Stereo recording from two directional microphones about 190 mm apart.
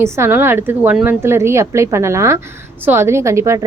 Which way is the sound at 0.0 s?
10° right (ahead or behind).